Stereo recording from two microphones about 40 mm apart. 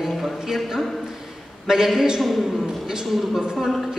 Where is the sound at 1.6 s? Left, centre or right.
Centre.